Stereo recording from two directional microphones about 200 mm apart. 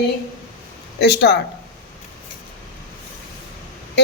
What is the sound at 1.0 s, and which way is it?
Speech, 55° left (ahead or behind).